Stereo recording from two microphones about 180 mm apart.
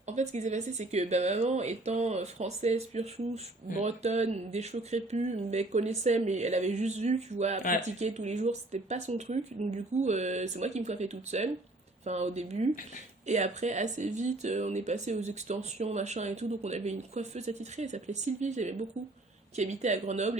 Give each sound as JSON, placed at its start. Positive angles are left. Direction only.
{"t": 0.1, "sound": "speech", "side_deg": -40}